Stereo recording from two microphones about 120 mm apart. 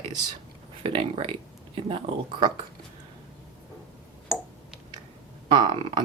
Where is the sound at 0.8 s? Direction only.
55° right (ahead or behind).